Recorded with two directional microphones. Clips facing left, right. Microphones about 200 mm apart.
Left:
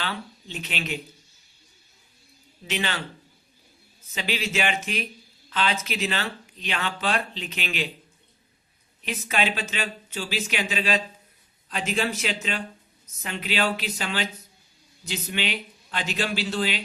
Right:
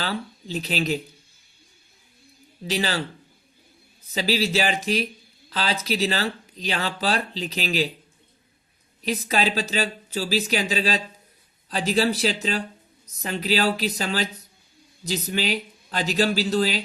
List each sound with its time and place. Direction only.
0.0 s speech: 35° right (ahead or behind)
2.6 s speech: 35° right (ahead or behind)
4.1 s speech: 35° right (ahead or behind)
9.0 s speech: 35° right (ahead or behind)